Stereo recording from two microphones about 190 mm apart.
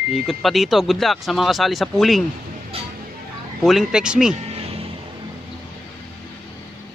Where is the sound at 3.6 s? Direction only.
Centre (ahead or behind).